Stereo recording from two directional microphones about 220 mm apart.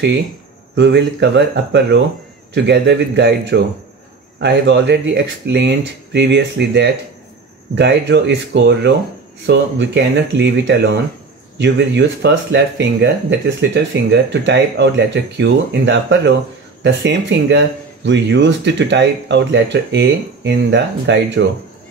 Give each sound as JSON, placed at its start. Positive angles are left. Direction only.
{"t": 0.7, "sound": "speech", "side_deg": -50}